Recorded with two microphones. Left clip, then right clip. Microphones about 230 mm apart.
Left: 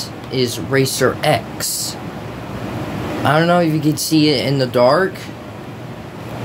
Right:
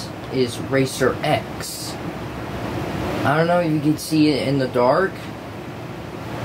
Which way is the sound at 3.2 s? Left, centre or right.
Left.